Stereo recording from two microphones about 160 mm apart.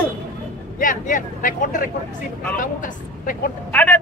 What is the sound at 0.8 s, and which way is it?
Speech, 55° left (ahead or behind).